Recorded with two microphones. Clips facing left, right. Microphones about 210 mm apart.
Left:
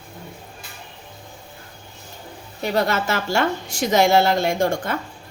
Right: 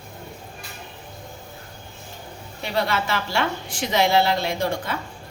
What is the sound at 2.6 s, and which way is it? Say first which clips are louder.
A woman's voice: left 3 dB; 45° left (ahead or behind).